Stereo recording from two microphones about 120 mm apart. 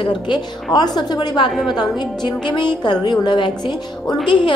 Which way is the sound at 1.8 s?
40° left (ahead or behind).